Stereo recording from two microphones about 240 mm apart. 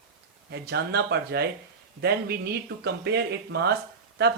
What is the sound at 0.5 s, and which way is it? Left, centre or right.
Speech, right.